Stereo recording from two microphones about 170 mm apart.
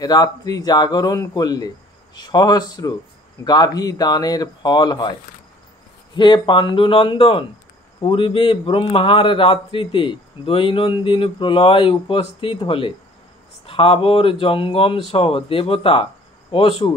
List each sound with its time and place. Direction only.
0.0 s speech: 25° left (ahead or behind)
6.1 s a man's voice: 25° left (ahead or behind)